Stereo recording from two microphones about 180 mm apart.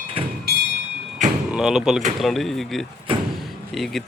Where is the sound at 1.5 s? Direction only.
Centre (ahead or behind).